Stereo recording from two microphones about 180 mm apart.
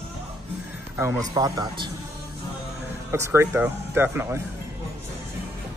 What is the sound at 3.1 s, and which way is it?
Speech, 15° right (ahead or behind).